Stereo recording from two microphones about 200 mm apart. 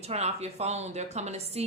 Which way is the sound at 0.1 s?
30° right (ahead or behind).